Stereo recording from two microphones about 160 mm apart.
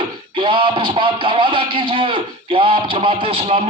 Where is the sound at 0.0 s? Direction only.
30° right (ahead or behind).